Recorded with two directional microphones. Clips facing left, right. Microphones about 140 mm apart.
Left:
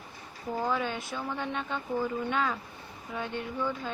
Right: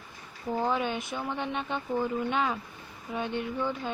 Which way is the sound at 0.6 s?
20° right (ahead or behind).